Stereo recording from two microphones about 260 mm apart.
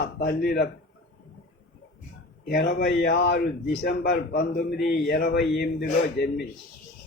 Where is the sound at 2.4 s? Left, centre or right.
Left.